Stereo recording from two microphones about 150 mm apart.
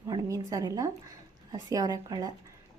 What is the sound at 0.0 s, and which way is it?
A woman's voice, 20° right (ahead or behind).